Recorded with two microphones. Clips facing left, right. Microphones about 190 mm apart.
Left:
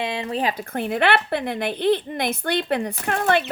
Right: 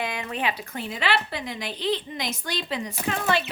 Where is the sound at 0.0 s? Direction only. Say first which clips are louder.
Left 4 dB; 30° left (ahead or behind).